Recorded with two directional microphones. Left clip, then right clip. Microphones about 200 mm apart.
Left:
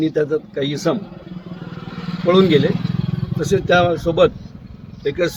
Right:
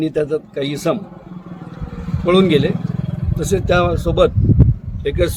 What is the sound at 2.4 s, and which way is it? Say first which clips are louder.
Speech: left 2 dB; 20° right (ahead or behind).